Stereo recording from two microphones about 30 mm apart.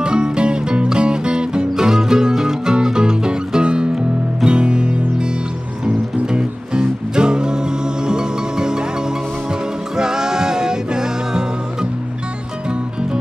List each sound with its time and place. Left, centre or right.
0.0 s music: right
1.8 s music: right
6.3 s music: right
9.9 s music: right